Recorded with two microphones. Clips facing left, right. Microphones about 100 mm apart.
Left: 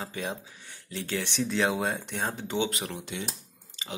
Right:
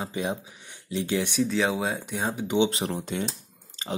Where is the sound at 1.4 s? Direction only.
Centre (ahead or behind); by 2.7 s 15° right (ahead or behind).